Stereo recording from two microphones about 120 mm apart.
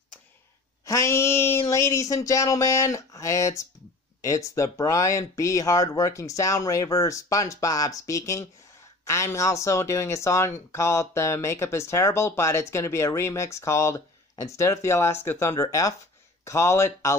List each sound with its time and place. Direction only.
0.8 s speech: 25° left (ahead or behind)